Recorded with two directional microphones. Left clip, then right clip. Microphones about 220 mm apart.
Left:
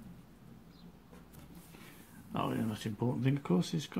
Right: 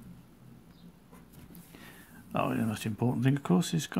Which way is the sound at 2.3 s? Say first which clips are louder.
Right 5 dB; 25° right (ahead or behind).